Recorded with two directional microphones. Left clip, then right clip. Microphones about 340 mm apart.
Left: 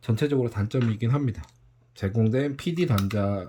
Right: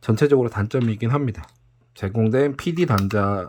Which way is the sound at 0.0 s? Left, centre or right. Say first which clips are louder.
Right 8 dB; centre.